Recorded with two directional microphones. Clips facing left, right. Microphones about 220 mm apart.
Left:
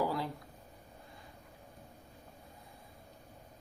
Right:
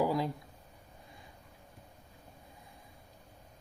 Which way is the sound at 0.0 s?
15° right (ahead or behind).